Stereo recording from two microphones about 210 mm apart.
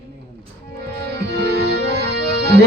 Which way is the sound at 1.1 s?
50° right (ahead or behind).